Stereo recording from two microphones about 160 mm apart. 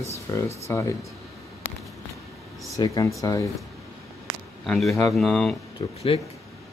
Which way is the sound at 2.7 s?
20° left (ahead or behind).